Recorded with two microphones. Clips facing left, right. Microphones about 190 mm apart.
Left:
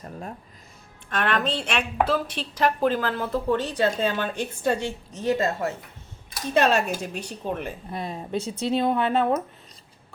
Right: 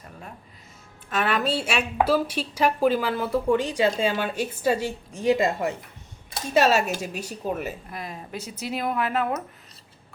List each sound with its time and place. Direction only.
1.1 s a woman's voice: 5° right (ahead or behind)
7.9 s speech: 30° left (ahead or behind)